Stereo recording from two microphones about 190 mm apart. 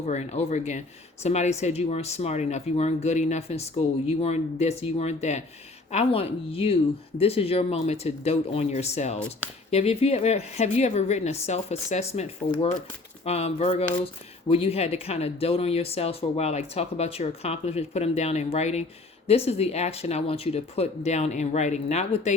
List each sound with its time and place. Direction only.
0.0 s speech: 35° left (ahead or behind)